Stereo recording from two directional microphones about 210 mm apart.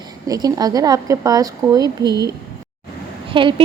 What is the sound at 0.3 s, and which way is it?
A woman's voice, 15° right (ahead or behind).